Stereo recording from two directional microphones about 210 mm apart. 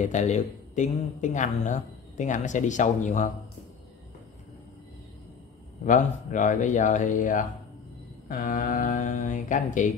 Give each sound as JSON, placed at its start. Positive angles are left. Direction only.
{"t": 0.0, "sound": "speech", "side_deg": 35}
{"t": 5.9, "sound": "speech", "side_deg": 35}